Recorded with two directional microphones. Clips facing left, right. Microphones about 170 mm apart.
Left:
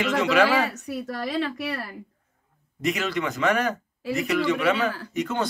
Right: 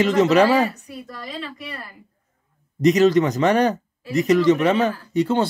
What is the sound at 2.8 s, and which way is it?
Speech, 40° right (ahead or behind).